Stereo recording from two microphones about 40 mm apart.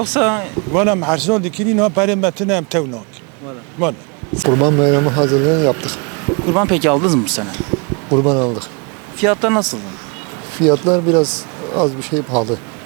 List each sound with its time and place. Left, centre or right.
0.0 s speech: centre
5.7 s a sound: right
6.4 s speech: centre